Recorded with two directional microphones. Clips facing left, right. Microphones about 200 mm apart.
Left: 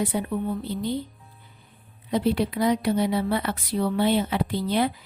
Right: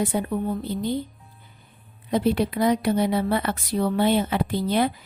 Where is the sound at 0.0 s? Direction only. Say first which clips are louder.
Right 2 dB; 45° right (ahead or behind).